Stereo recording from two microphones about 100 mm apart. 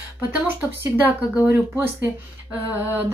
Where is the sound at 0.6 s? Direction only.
20° right (ahead or behind).